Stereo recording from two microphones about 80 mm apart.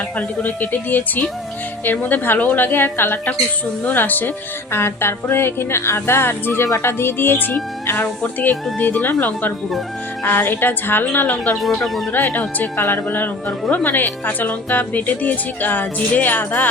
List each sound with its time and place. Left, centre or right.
0.2 s a woman's voice: left
11.5 s speech: centre
12.1 s speech: left